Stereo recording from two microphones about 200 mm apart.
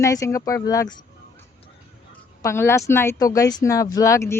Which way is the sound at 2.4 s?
10° left (ahead or behind).